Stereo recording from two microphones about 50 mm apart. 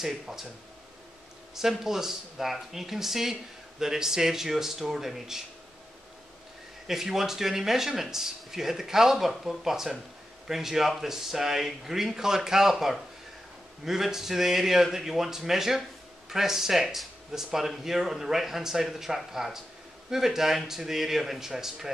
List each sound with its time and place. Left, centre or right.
0.0 s speech: centre
1.5 s speech: centre
6.9 s speech: centre